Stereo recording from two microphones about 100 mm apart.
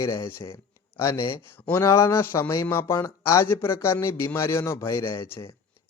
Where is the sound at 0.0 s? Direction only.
35° left (ahead or behind).